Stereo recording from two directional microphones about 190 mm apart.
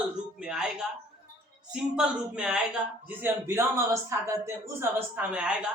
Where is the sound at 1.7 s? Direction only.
5° right (ahead or behind).